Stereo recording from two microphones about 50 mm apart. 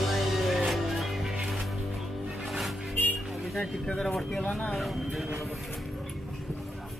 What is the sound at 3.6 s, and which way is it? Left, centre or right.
Speech, centre.